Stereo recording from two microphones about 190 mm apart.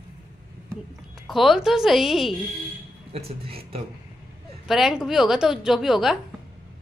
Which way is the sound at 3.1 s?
30° right (ahead or behind).